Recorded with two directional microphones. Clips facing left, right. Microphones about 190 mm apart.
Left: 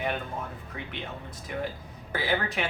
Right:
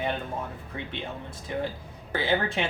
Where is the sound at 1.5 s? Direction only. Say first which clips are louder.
Right 2 dB; 30° right (ahead or behind).